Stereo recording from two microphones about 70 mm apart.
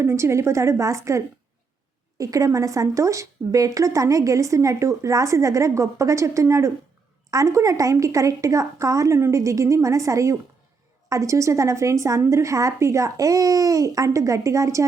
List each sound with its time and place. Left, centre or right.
0.0 s speech: right